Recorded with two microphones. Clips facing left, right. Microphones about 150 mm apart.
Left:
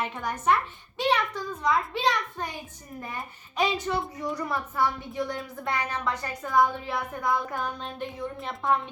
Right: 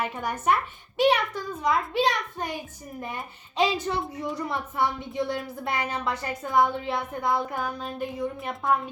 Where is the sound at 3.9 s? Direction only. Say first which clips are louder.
Even; 35° right (ahead or behind).